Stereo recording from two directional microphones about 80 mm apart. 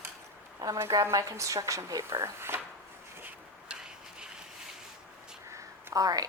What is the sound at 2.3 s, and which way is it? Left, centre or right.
Speech, right.